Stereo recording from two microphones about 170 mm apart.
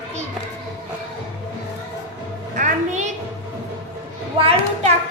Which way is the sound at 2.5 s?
45° right (ahead or behind).